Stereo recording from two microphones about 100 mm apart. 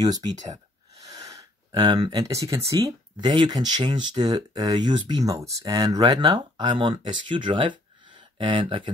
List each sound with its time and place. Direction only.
0.0 s speech: 40° right (ahead or behind); by 8.9 s 60° right (ahead or behind)